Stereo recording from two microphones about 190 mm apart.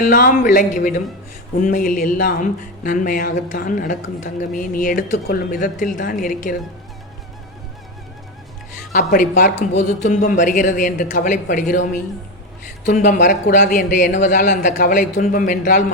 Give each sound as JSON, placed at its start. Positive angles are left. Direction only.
{"t": 0.0, "sound": "speech", "side_deg": 45}
{"t": 8.9, "sound": "speech", "side_deg": 50}
{"t": 12.8, "sound": "speech", "side_deg": 45}